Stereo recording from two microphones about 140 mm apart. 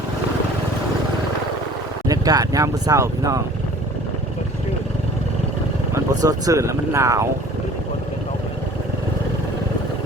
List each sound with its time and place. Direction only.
2.0 s speech: 25° right (ahead or behind)
5.9 s speech: 25° right (ahead or behind)